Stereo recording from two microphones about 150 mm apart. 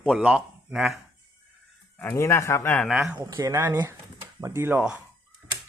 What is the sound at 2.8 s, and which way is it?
Speech, 5° right (ahead or behind).